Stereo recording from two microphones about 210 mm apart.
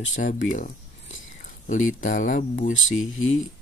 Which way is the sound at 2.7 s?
70° left (ahead or behind).